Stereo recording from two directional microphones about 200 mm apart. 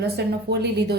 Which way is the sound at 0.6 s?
55° right (ahead or behind).